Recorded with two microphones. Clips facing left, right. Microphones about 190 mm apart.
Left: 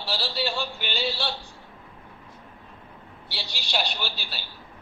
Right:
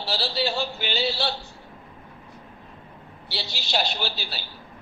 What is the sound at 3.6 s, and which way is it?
Speech, 40° right (ahead or behind).